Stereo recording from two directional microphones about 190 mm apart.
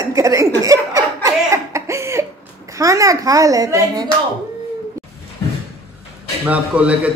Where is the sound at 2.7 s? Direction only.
15° right (ahead or behind).